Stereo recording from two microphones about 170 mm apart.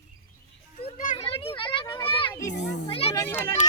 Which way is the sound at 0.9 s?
50° left (ahead or behind).